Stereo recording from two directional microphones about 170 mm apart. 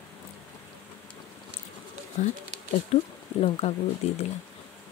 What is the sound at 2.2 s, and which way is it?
Speech, 45° left (ahead or behind).